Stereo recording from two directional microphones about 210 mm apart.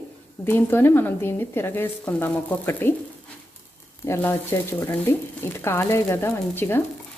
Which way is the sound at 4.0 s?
10° left (ahead or behind).